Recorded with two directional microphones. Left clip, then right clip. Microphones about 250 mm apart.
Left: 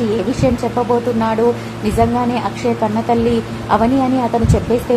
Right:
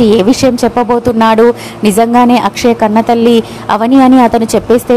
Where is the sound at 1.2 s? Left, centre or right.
Right.